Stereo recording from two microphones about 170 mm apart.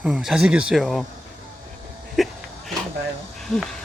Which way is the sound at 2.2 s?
Centre (ahead or behind).